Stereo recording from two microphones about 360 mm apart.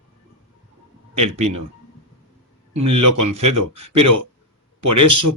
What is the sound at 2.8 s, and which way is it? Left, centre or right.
Speech, right.